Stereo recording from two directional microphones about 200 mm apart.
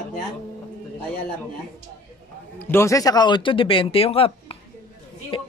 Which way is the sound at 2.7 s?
15° left (ahead or behind).